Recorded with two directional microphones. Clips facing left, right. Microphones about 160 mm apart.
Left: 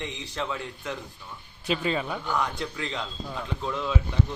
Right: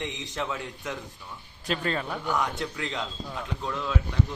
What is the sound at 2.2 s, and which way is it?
Speech, 15° right (ahead or behind).